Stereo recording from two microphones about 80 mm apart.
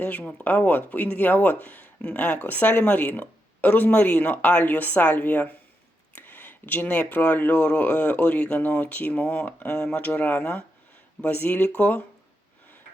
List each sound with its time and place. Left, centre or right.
0.0 s speech: centre